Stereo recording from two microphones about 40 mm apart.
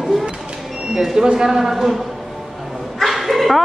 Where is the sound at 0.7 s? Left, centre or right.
Centre.